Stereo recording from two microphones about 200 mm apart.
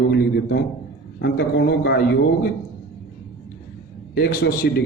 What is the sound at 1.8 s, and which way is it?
Speech, 55° left (ahead or behind).